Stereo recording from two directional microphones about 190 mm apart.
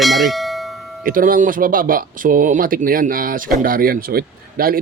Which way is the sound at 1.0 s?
45° right (ahead or behind).